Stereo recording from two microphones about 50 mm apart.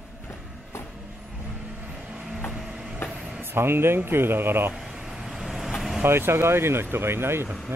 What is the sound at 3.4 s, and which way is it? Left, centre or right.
Speech, right.